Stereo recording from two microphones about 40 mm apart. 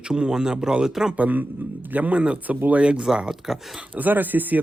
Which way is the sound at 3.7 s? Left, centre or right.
Right.